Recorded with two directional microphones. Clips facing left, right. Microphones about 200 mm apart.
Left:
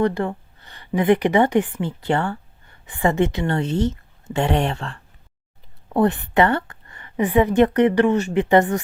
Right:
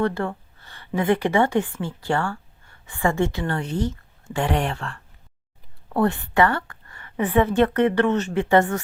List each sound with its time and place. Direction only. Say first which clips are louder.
0.0 s a woman's voice: left 3 dB; 15° left (ahead or behind)